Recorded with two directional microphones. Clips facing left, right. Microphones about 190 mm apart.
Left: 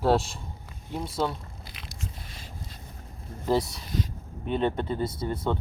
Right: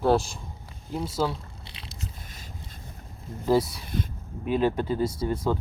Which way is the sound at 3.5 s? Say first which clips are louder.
Right 3 dB; centre (ahead or behind).